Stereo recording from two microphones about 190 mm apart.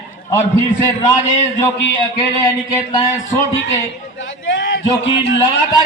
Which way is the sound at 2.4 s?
20° left (ahead or behind).